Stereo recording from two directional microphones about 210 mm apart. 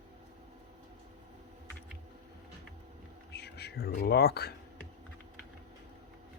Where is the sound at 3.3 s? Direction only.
50° left (ahead or behind).